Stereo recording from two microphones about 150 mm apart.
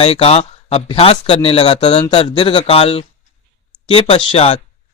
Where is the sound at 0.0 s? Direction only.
40° left (ahead or behind).